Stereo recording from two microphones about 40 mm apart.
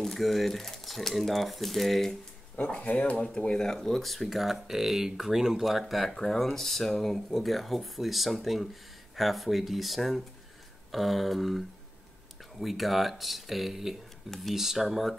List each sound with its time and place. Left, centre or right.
0.0 s speech: centre
2.5 s speech: left
3.3 s speech: centre
5.7 s speech: centre